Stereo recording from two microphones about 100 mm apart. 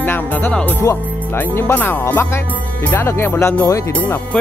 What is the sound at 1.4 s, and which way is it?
Music, 20° left (ahead or behind).